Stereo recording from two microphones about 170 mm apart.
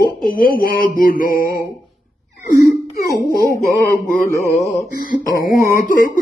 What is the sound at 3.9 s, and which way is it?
Mantra, 55° left (ahead or behind).